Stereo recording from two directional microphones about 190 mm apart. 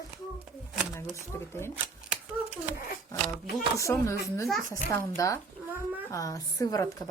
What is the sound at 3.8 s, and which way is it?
A woman's voice, 15° left (ahead or behind).